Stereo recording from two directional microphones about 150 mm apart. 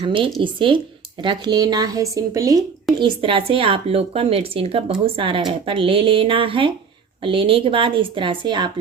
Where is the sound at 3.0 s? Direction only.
35° right (ahead or behind).